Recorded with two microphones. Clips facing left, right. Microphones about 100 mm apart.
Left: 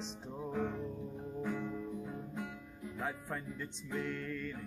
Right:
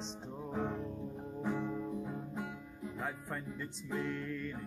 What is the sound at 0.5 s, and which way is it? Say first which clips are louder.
Music: even; 25° right (ahead or behind).